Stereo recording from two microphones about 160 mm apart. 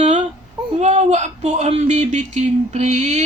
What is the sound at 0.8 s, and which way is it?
Speech, 45° right (ahead or behind).